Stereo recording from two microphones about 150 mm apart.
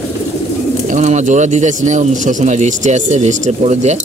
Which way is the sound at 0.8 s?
50° right (ahead or behind).